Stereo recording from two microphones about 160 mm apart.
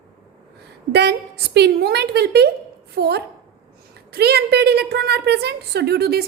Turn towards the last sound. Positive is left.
turn(degrees=-80)